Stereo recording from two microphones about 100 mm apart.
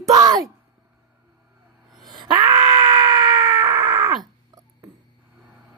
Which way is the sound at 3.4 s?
45° right (ahead or behind).